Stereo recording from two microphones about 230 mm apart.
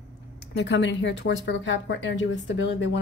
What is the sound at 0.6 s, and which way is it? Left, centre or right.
Speech, left.